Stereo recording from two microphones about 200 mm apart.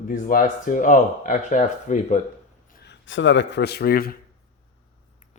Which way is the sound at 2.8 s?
65° left (ahead or behind).